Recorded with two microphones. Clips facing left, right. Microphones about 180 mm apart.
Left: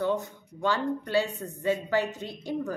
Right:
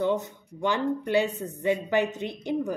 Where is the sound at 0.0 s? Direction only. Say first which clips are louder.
Right 2 dB; 20° right (ahead or behind).